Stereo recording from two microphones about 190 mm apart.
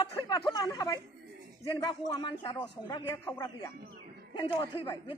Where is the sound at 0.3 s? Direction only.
20° left (ahead or behind).